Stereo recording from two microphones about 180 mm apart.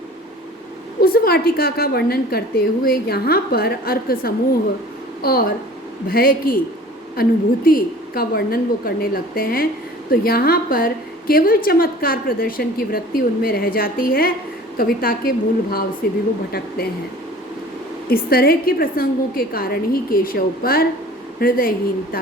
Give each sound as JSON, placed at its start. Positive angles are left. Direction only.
{"t": 1.0, "sound": "a woman's voice", "side_deg": 55}
{"t": 18.1, "sound": "a woman's voice", "side_deg": 55}